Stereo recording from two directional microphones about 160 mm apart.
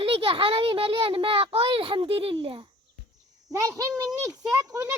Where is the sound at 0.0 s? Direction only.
35° right (ahead or behind).